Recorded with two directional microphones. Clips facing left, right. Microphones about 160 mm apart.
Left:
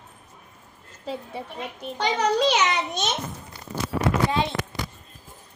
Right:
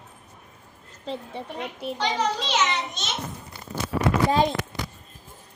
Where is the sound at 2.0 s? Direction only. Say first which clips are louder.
Left 5 dB; 60° left (ahead or behind).